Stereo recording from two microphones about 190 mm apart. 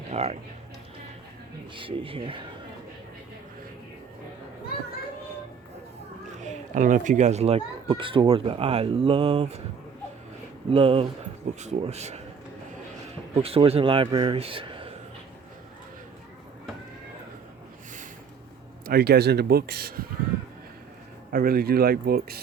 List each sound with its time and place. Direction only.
0.1 s speech: 35° right (ahead or behind)
1.7 s speech: 25° right (ahead or behind)
6.4 s speech: 45° right (ahead or behind)
10.7 s speech: 30° right (ahead or behind)
13.3 s speech: 30° right (ahead or behind)
18.9 s speech: 55° right (ahead or behind)
21.3 s speech: 50° right (ahead or behind)